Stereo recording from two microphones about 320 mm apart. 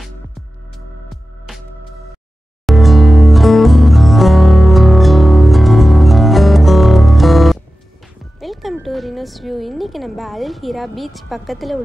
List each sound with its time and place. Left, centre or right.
2.6 s music: centre
8.4 s speech: centre